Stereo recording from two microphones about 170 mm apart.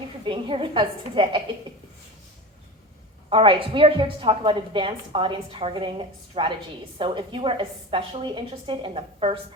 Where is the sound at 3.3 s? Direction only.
30° right (ahead or behind).